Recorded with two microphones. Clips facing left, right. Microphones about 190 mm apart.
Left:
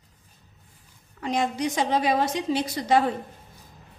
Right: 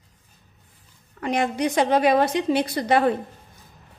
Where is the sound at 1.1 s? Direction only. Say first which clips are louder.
Right 3 dB; 60° right (ahead or behind).